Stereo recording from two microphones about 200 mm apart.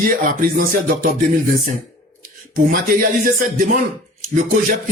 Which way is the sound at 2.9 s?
45° right (ahead or behind).